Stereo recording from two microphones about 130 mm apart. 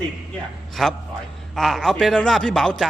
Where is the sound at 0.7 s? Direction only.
Centre (ahead or behind).